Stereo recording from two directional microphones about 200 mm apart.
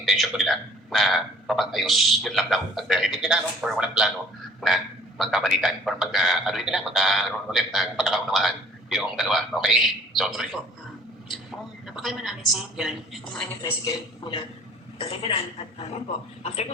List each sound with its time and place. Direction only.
0.0 s a man's voice: centre (ahead or behind)
11.9 s a man's voice: centre (ahead or behind)
13.6 s speech: 20° left (ahead or behind)